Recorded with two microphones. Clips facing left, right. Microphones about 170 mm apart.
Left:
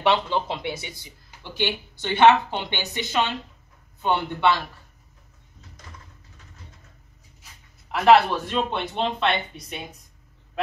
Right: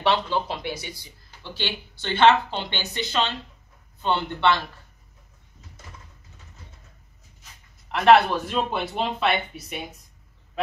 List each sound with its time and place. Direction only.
0.0 s speech: 20° left (ahead or behind)
7.9 s speech: centre (ahead or behind)